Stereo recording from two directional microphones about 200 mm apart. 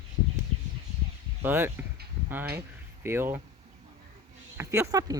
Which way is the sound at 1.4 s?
10° right (ahead or behind).